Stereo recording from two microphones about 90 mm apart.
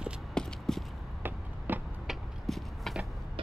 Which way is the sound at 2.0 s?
Centre (ahead or behind).